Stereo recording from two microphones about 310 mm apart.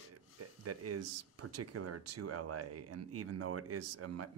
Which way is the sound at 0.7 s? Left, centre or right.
Right.